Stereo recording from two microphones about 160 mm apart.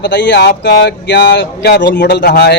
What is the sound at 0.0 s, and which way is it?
Speech, 90° left.